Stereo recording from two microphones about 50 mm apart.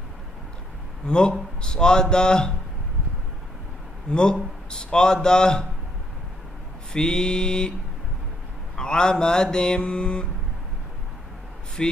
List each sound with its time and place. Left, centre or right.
1.0 s a man's voice: centre
4.1 s a man's voice: centre
6.9 s a man's voice: centre
8.7 s a man's voice: centre
11.8 s a man's voice: centre